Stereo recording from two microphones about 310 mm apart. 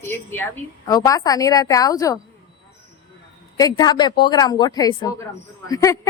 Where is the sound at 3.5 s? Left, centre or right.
Centre.